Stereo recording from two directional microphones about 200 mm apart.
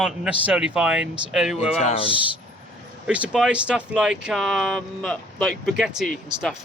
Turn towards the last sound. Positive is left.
turn(degrees=0)  # may be behind; listen again after turning